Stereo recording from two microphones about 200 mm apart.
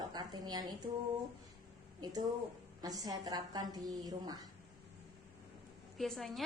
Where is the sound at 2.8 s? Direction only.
20° right (ahead or behind).